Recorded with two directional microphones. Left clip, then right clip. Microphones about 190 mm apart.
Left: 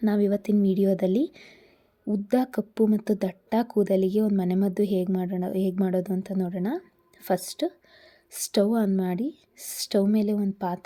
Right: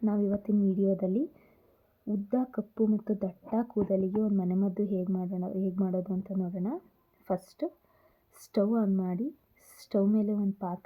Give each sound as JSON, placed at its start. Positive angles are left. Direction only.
{"t": 0.0, "sound": "a woman's voice", "side_deg": 25}
{"t": 2.7, "sound": "a woman's voice", "side_deg": 30}